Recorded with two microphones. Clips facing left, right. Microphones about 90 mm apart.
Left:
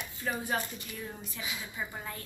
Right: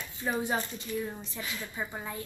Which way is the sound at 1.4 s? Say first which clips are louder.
Right 1 dB; 5° left (ahead or behind).